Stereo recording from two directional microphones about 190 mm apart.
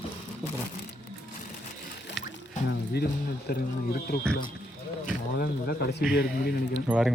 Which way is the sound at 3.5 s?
55° left (ahead or behind).